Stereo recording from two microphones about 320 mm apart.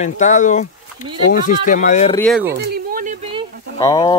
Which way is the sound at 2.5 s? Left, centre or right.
Right.